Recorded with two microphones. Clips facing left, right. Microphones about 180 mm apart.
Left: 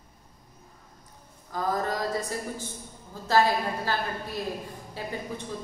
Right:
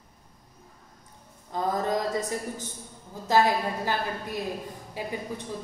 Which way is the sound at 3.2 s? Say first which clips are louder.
Right 1 dB; 15° right (ahead or behind).